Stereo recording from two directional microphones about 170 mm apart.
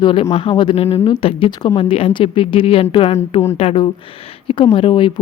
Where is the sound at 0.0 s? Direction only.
30° left (ahead or behind).